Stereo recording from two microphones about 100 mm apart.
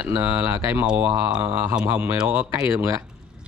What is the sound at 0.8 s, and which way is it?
Speech, 10° right (ahead or behind).